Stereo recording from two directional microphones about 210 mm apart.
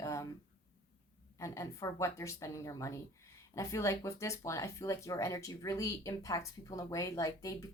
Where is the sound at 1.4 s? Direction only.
15° left (ahead or behind).